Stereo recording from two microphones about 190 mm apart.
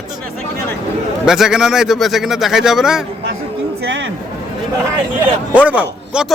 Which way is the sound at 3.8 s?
70° right (ahead or behind).